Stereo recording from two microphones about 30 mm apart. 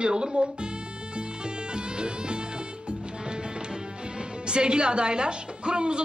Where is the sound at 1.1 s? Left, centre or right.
Right.